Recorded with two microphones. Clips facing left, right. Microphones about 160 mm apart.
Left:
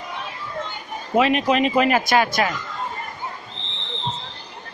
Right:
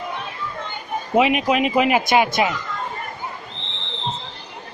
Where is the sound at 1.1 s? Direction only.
15° right (ahead or behind).